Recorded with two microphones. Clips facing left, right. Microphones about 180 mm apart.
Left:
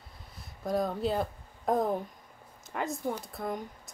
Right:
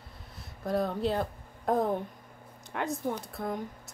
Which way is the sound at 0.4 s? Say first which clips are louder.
Even; centre (ahead or behind).